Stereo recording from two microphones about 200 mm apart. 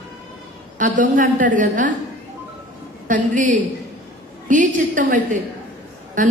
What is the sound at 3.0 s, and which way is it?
A woman's voice, 40° right (ahead or behind).